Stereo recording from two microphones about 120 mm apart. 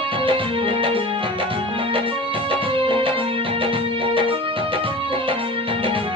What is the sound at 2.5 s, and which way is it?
Music, 45° right (ahead or behind).